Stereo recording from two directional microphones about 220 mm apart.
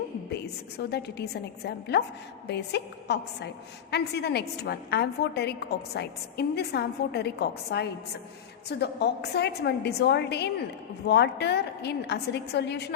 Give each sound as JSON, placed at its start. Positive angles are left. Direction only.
{"t": 0.3, "sound": "a woman's voice", "side_deg": 50}